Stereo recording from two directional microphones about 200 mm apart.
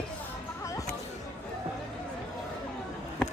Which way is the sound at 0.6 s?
15° left (ahead or behind).